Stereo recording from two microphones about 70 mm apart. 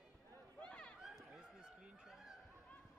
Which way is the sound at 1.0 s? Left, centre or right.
Centre.